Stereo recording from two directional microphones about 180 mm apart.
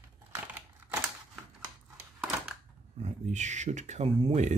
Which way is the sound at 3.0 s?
40° right (ahead or behind).